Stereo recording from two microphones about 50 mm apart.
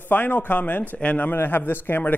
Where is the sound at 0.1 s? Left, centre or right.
Left.